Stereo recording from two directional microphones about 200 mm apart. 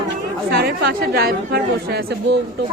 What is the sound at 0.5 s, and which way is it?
A woman's voice, 50° right (ahead or behind).